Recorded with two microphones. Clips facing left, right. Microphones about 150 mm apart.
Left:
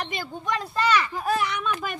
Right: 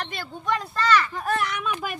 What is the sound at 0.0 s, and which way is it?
Speech, 10° left (ahead or behind).